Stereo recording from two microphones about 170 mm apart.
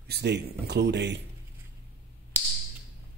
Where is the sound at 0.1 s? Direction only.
75° right (ahead or behind).